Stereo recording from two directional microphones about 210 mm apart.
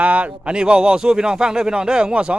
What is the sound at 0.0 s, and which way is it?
A man's voice, 5° right (ahead or behind).